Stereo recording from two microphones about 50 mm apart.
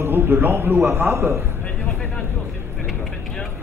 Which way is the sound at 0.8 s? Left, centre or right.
Right.